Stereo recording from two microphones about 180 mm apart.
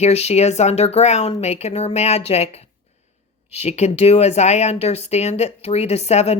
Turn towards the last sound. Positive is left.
turn(degrees=35)  # may be behind; listen again after turning